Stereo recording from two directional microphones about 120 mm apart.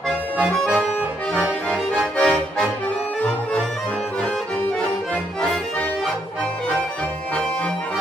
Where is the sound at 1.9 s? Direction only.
10° left (ahead or behind).